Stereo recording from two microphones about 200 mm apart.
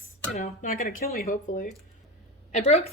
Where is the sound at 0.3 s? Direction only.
40° left (ahead or behind).